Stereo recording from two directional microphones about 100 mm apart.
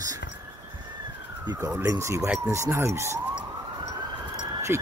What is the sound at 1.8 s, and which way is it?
Speech, 30° right (ahead or behind).